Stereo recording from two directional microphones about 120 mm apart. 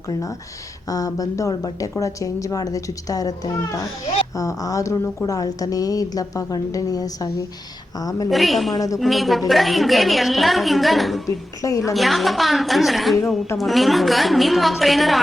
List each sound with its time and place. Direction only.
0.1 s a woman's voice: 25° left (ahead or behind)
8.3 s a woman's voice: centre (ahead or behind)
8.7 s a woman's voice: 30° left (ahead or behind)
9.0 s a woman's voice: centre (ahead or behind)
11.3 s a woman's voice: 30° left (ahead or behind)
11.9 s a woman's voice: centre (ahead or behind)